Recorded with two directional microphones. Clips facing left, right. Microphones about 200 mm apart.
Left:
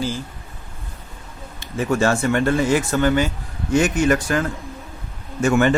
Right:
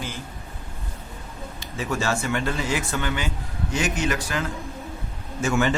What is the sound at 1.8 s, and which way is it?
A man's voice, 50° left (ahead or behind).